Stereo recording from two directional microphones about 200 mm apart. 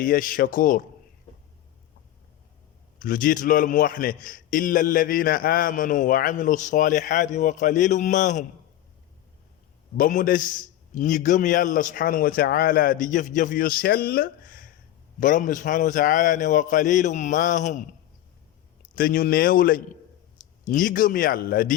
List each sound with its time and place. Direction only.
0.0 s a man's voice: 45° left (ahead or behind)
3.0 s a man's voice: 45° left (ahead or behind)
10.0 s a man's voice: 40° left (ahead or behind)
18.9 s a man's voice: 45° left (ahead or behind)